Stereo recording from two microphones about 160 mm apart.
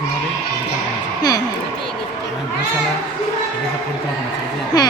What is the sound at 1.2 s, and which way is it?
Speech, 25° left (ahead or behind).